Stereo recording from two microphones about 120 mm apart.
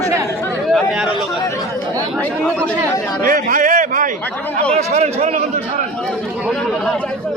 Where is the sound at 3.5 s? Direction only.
90° right.